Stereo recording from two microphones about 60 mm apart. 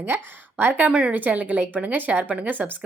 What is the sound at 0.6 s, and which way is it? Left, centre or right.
Speech, right.